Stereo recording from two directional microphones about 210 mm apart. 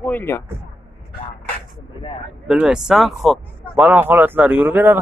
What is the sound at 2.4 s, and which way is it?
Speech, 5° right (ahead or behind).